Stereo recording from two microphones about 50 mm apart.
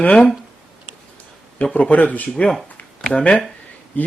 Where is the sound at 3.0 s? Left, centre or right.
Centre.